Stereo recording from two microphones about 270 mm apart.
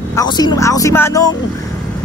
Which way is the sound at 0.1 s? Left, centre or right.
Centre.